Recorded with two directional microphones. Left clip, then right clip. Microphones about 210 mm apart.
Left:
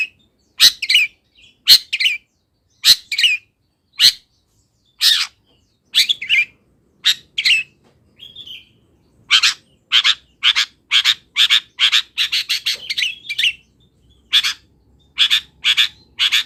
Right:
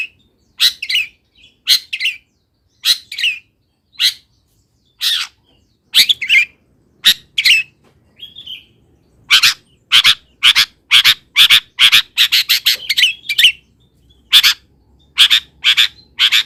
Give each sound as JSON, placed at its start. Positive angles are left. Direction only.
{"t": 0.5, "sound": "bird", "side_deg": 20}
{"t": 4.9, "sound": "bird", "side_deg": 20}
{"t": 5.9, "sound": "bird", "side_deg": -25}
{"t": 9.2, "sound": "frog", "side_deg": -20}
{"t": 12.9, "sound": "bird", "side_deg": -25}
{"t": 14.3, "sound": "frog", "side_deg": -25}